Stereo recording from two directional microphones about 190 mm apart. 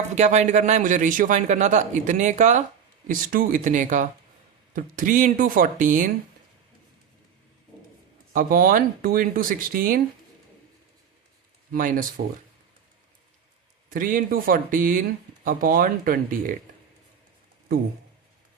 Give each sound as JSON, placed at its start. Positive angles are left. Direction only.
{"t": 0.2, "sound": "a man's voice", "side_deg": -35}
{"t": 8.3, "sound": "speech", "side_deg": -45}
{"t": 11.7, "sound": "speech", "side_deg": -45}
{"t": 13.9, "sound": "speech", "side_deg": -45}